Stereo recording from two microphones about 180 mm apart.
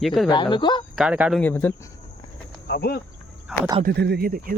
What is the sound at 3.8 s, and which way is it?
Speech, 65° right (ahead or behind).